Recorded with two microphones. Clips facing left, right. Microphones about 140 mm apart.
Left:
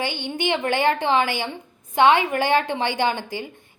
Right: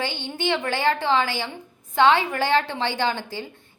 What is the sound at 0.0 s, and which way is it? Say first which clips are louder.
A woman's voice: left 2 dB; 15° left (ahead or behind).